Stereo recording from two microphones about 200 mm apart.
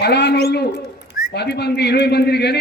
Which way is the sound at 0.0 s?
55° left (ahead or behind).